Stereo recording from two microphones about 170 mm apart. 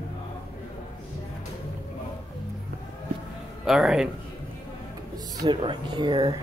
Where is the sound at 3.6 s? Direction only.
Centre (ahead or behind).